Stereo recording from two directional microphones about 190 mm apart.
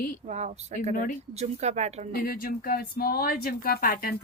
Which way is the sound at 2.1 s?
50° left (ahead or behind).